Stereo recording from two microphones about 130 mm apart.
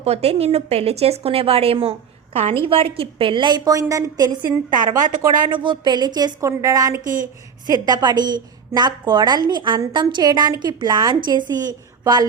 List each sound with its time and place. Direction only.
0.0 s a woman's voice: 50° right (ahead or behind); by 4.3 s 25° right (ahead or behind)
5.3 s a woman's voice: 35° right (ahead or behind)